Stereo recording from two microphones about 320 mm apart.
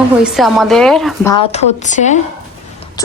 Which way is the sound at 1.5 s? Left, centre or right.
Left.